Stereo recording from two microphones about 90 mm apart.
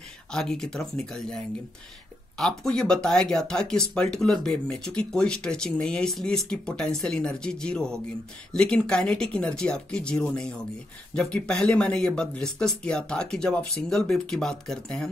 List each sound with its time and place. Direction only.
0.3 s speech: 5° left (ahead or behind)
2.3 s speech: 5° left (ahead or behind)